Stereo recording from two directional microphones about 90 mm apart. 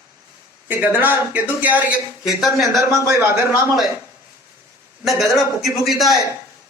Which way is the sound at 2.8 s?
30° right (ahead or behind).